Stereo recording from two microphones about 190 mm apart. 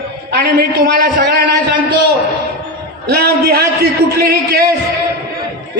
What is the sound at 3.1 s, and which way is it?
A man's voice, 55° right (ahead or behind).